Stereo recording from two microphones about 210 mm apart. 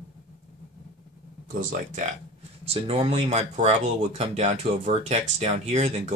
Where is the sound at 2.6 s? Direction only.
30° right (ahead or behind).